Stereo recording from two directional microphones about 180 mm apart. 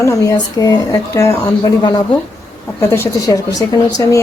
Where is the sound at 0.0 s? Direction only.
20° left (ahead or behind).